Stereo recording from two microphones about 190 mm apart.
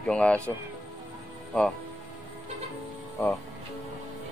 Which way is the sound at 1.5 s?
5° left (ahead or behind).